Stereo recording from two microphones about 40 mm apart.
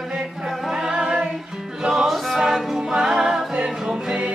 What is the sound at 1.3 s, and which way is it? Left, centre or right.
Music, centre.